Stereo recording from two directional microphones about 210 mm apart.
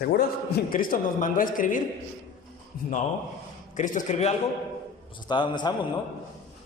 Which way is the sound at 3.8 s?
35° left (ahead or behind).